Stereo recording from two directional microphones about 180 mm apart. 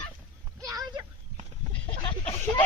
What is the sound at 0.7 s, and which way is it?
Speech, 20° right (ahead or behind).